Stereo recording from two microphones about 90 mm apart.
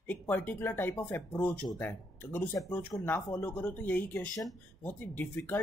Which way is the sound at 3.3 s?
15° left (ahead or behind).